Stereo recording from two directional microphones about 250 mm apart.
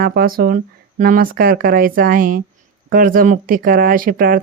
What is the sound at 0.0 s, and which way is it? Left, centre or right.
Speech, right.